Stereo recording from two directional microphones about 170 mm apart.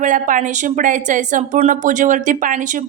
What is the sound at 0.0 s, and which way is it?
Speech, 50° right (ahead or behind).